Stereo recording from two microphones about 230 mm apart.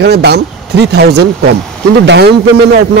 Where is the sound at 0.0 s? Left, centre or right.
Right.